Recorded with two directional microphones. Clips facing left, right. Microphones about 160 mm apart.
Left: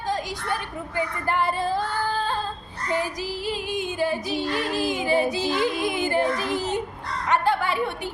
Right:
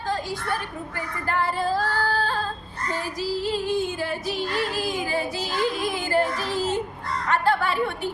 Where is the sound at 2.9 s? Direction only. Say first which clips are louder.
Left 1 dB; 15° left (ahead or behind).